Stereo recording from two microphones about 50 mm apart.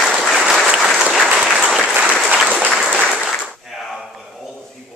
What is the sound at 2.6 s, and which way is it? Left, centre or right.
Applause, centre.